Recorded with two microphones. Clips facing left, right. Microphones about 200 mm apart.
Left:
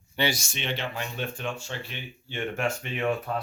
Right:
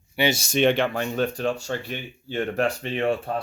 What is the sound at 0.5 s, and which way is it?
Speech, 55° right (ahead or behind).